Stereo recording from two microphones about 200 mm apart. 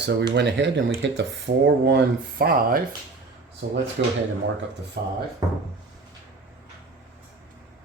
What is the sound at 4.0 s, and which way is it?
Speech, 55° right (ahead or behind).